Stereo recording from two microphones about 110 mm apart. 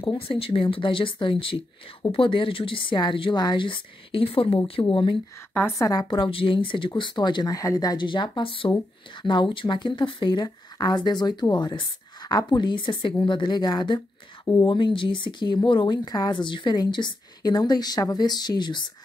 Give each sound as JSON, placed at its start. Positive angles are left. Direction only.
{"t": 0.0, "sound": "a woman's voice", "side_deg": 50}
{"t": 4.8, "sound": "a woman's voice", "side_deg": 50}
{"t": 5.5, "sound": "a woman's voice", "side_deg": 15}
{"t": 5.8, "sound": "a woman's voice", "side_deg": 30}
{"t": 6.0, "sound": "a woman's voice", "side_deg": 50}
{"t": 16.1, "sound": "a woman's voice", "side_deg": 40}